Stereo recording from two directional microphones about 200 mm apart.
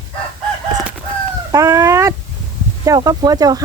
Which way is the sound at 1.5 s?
15° right (ahead or behind).